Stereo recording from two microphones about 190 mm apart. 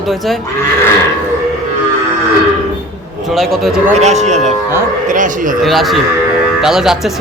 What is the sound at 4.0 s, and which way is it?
Speech, 35° right (ahead or behind).